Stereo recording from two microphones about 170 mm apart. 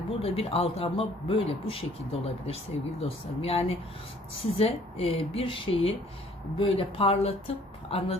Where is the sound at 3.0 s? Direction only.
35° left (ahead or behind).